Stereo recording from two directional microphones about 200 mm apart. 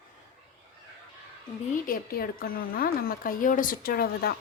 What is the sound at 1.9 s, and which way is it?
Speech, 45° left (ahead or behind).